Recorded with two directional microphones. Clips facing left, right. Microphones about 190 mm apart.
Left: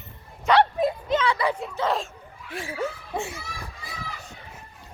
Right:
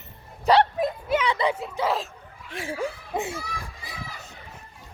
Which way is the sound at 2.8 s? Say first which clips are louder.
Even; 20° right (ahead or behind).